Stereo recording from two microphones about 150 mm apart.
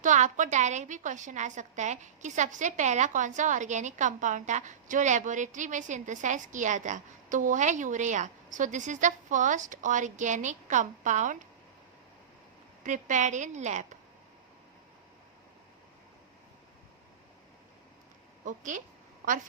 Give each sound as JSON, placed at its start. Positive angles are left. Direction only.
{"t": 0.0, "sound": "a woman's voice", "side_deg": -55}
{"t": 12.8, "sound": "a woman's voice", "side_deg": -55}
{"t": 18.4, "sound": "a woman's voice", "side_deg": -55}